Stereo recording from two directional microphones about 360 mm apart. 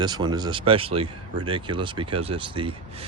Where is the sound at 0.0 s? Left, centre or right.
Centre.